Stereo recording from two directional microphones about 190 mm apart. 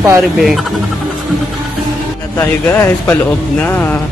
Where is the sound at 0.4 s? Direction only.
Centre (ahead or behind).